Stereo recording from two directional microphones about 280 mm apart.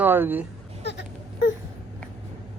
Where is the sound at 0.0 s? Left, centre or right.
Centre.